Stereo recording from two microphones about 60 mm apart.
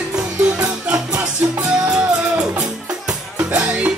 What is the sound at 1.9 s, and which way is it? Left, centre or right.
Music, centre.